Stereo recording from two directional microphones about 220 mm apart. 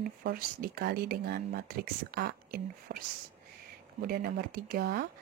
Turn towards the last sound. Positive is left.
turn(degrees=-40)  # may be behind; listen again after turning